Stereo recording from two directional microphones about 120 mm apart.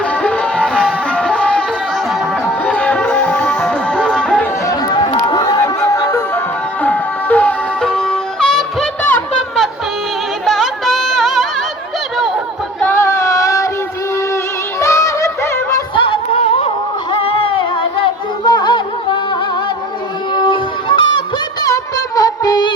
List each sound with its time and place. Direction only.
0.0 s music: 10° left (ahead or behind)
4.6 s music: 30° left (ahead or behind); by 9.2 s 15° left (ahead or behind)
10.4 s music: centre (ahead or behind)
12.1 s chatter: centre (ahead or behind)
12.8 s female singing: 20° left (ahead or behind)
14.8 s music: 25° left (ahead or behind)
16.0 s music: 50° left (ahead or behind)
20.3 s honk: 45° left (ahead or behind)
21.6 s music: 30° left (ahead or behind)